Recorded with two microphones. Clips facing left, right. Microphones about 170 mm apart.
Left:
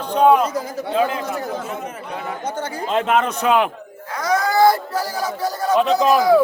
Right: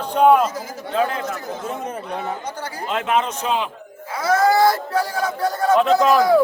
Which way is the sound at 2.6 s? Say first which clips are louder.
Left 4 dB; 35° left (ahead or behind).